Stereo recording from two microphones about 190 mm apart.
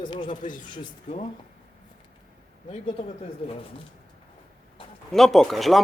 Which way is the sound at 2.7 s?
35° left (ahead or behind).